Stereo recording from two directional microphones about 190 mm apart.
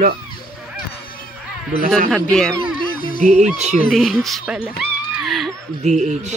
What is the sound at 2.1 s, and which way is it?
Speech, 5° left (ahead or behind).